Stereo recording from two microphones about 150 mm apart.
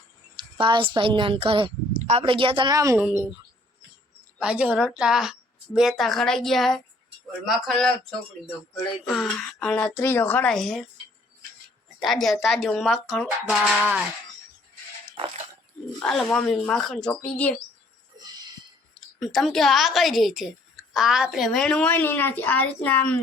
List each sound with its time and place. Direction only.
0.3 s a woman's voice: 30° right (ahead or behind)
1.9 s a sound: 50° right (ahead or behind)
2.2 s a woman's voice: 35° right (ahead or behind)
3.0 s a woman's voice: 10° right (ahead or behind)
4.4 s a woman's voice: 5° right (ahead or behind)
9.0 s a woman's voice: centre (ahead or behind)
11.9 s a woman's voice: centre (ahead or behind)
16.0 s a woman's voice: 5° left (ahead or behind)
18.9 s a woman's voice: centre (ahead or behind)